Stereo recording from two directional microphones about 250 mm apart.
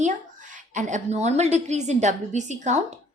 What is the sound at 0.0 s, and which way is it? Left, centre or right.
A woman's voice, right.